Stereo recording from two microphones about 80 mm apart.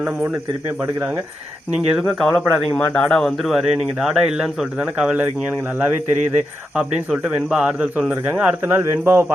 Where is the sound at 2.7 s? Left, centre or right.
Centre.